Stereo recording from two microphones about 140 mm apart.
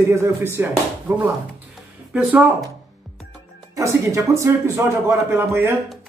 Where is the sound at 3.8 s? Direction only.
20° right (ahead or behind).